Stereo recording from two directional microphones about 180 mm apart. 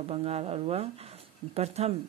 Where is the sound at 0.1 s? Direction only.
35° right (ahead or behind).